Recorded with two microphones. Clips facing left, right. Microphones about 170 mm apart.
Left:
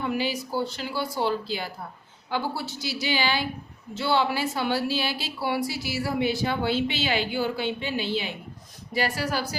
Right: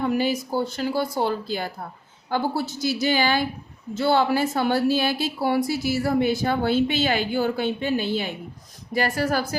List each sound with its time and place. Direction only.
0.0 s a woman's voice: 45° right (ahead or behind)